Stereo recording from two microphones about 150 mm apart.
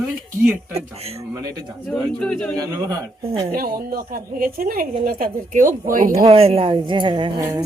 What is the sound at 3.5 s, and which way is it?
A woman's voice, 75° right (ahead or behind).